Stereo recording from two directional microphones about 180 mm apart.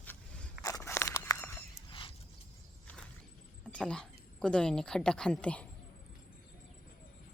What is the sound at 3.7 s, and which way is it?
A woman's voice, 5° left (ahead or behind).